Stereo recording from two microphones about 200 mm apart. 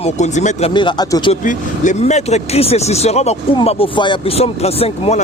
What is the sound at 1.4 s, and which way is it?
Speech, 35° left (ahead or behind).